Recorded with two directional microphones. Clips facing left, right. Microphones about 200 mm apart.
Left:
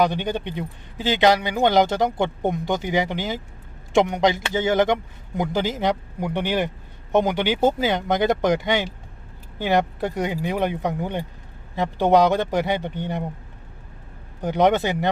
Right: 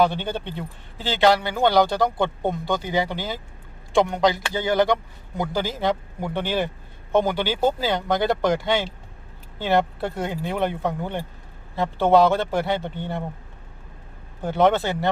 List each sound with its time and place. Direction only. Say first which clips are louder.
0.0 s a man's voice: even; 15° left (ahead or behind)
14.4 s a man's voice: left 1 dB; 15° left (ahead or behind)